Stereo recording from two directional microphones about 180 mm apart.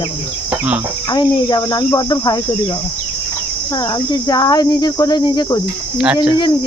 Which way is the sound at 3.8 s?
20° left (ahead or behind).